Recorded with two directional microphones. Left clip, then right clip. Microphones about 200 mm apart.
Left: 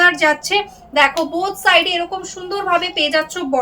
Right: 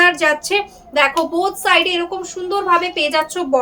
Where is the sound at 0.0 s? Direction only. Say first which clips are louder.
Even; 20° right (ahead or behind).